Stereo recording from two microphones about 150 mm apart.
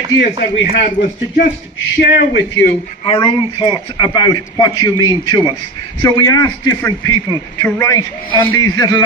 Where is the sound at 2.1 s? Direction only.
90° left.